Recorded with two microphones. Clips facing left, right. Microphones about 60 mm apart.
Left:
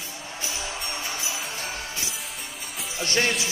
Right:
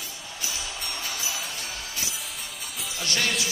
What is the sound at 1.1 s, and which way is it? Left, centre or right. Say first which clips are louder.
Music: left 1 dB; left.